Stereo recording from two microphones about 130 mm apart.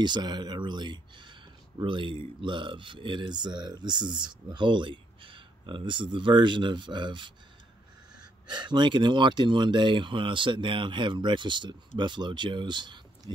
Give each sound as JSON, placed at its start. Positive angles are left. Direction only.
{"t": 0.0, "sound": "speech", "side_deg": -35}